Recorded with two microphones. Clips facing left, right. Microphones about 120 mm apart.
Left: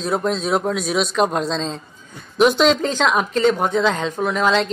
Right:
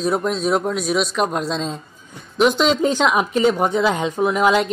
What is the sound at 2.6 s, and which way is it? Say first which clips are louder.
Speech: even; 10° right (ahead or behind).